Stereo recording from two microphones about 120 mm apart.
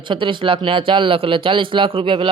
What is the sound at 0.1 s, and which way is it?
A man's voice, 45° right (ahead or behind).